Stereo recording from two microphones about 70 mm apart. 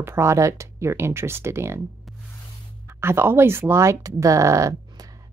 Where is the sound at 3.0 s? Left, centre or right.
Right.